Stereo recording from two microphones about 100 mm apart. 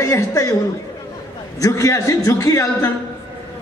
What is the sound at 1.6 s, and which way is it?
A man's voice, 35° left (ahead or behind).